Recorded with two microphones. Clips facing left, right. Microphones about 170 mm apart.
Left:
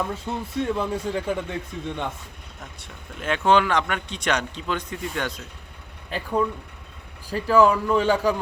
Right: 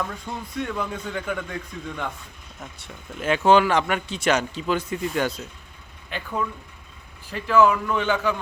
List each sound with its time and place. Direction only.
0.0 s a man's voice: 25° left (ahead or behind)
2.6 s speech: centre (ahead or behind)
6.1 s a man's voice: 35° left (ahead or behind)